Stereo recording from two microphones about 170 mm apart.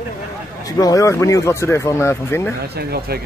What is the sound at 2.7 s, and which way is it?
Speech, 65° right (ahead or behind).